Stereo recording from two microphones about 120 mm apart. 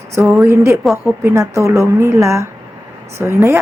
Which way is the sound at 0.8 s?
Centre (ahead or behind).